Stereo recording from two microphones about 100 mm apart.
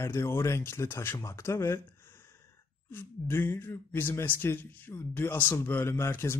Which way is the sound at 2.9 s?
20° left (ahead or behind).